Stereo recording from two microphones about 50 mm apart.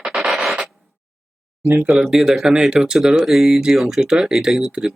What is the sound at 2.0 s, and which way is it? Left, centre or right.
Speech, centre.